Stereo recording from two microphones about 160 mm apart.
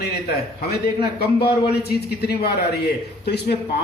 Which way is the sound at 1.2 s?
85° left.